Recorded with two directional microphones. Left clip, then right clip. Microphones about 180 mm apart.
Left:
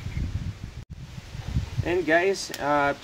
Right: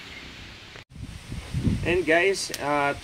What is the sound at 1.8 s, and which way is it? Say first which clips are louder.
Speech: right 1 dB; 25° left (ahead or behind).